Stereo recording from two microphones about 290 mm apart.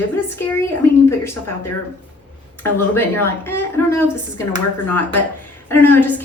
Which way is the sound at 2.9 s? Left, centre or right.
Centre.